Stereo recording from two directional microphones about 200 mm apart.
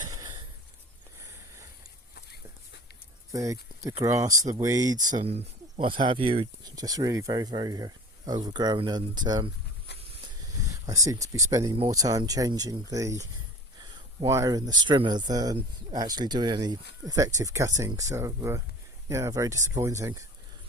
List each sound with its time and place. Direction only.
0.1 s a sound: 15° right (ahead or behind)
3.3 s speech: 15° right (ahead or behind)
4.9 s speech: 40° right (ahead or behind); by 9.5 s 20° right (ahead or behind)
10.8 s speech: 15° right (ahead or behind)
14.3 s speech: 15° right (ahead or behind)